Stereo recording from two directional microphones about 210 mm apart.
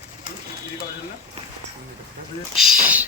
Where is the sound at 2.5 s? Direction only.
Centre (ahead or behind).